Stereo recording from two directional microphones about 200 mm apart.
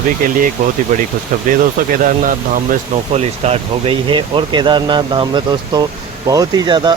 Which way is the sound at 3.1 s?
30° right (ahead or behind).